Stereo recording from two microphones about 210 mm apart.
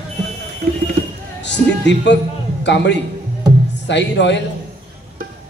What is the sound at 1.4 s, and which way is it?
Music, 55° left (ahead or behind).